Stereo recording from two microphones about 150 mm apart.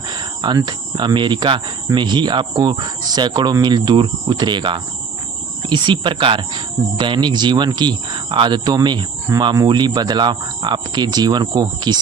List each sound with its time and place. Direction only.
0.1 s speech: 30° right (ahead or behind)